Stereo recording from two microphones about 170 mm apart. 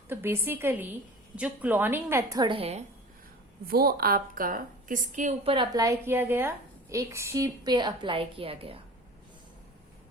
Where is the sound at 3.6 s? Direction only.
65° right (ahead or behind); by 5.3 s 45° right (ahead or behind).